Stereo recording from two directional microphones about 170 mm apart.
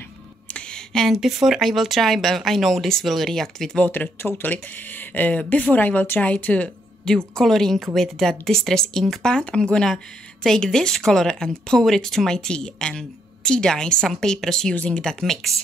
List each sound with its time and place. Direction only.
0.5 s speech: 5° left (ahead or behind)